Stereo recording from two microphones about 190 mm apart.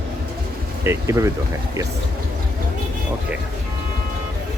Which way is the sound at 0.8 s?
15° right (ahead or behind).